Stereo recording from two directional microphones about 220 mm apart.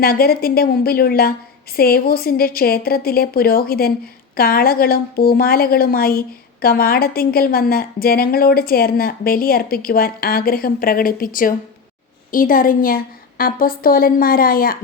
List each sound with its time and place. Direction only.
0.0 s a woman's voice: 45° left (ahead or behind)